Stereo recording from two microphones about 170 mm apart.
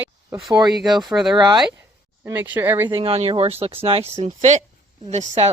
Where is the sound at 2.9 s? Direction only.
35° right (ahead or behind).